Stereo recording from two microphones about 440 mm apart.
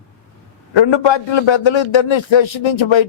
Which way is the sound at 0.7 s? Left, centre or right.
Left.